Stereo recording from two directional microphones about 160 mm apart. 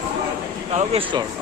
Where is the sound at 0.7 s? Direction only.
35° right (ahead or behind).